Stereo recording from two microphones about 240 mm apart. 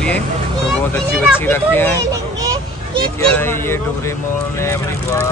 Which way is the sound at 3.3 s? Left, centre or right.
Centre.